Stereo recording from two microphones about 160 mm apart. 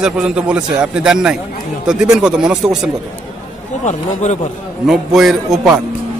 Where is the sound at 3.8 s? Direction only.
45° left (ahead or behind).